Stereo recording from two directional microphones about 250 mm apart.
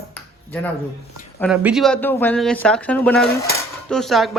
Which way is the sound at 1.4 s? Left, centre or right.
Centre.